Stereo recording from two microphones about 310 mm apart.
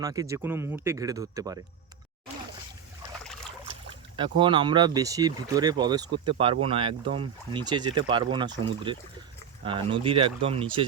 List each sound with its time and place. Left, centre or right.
0.0 s speech: centre
3.8 s speech: centre